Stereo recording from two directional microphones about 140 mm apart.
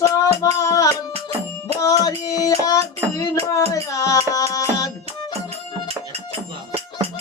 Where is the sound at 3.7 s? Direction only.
25° left (ahead or behind).